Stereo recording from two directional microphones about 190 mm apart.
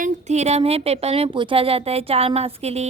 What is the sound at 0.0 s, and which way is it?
A woman's voice, 35° right (ahead or behind).